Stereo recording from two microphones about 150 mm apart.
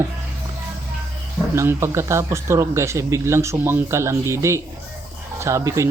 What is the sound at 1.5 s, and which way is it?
Speech, 20° right (ahead or behind).